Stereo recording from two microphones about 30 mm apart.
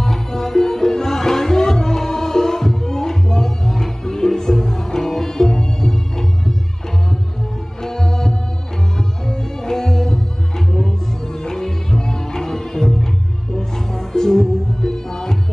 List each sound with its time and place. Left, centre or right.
0.0 s music: centre
7.8 s music: centre
11.3 s music: centre